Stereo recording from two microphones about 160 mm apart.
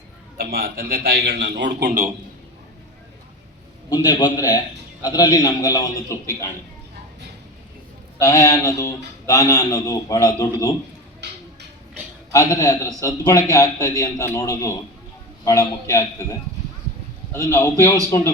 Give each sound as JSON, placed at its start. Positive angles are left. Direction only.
{"t": 0.3, "sound": "a man's voice", "side_deg": -70}
{"t": 3.8, "sound": "a man's voice", "side_deg": 25}
{"t": 8.2, "sound": "a man's voice", "side_deg": 20}
{"t": 11.2, "sound": "speech", "side_deg": -90}
{"t": 12.3, "sound": "a man's voice", "side_deg": 20}
{"t": 17.3, "sound": "a man's voice", "side_deg": 15}